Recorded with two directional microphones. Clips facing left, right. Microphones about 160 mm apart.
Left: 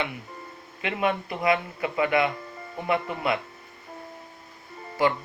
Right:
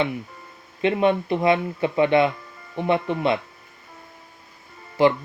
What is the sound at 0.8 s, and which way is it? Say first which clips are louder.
Speech: right 7 dB; 25° right (ahead or behind).